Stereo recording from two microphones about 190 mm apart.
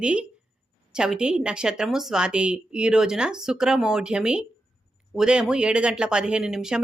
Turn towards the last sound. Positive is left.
turn(degrees=-5)  # may be behind; listen again after turning